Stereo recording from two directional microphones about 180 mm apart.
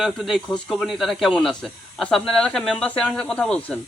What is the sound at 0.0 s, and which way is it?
Speech, centre (ahead or behind).